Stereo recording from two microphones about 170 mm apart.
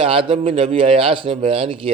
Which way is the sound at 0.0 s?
30° right (ahead or behind).